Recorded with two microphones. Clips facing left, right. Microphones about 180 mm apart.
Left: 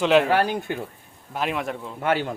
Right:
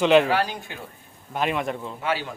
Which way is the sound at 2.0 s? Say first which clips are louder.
Left 6 dB; 55° left (ahead or behind).